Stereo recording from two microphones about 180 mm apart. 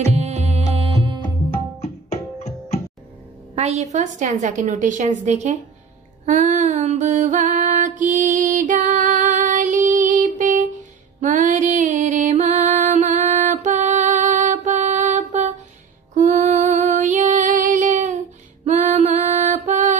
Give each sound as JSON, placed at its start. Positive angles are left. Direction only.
{"t": 0.1, "sound": "music", "side_deg": -35}
{"t": 1.2, "sound": "tabla", "side_deg": 35}
{"t": 3.5, "sound": "a woman's voice", "side_deg": -40}
{"t": 6.2, "sound": "music", "side_deg": -45}
{"t": 16.2, "sound": "female singing", "side_deg": -45}
{"t": 18.7, "sound": "music", "side_deg": -40}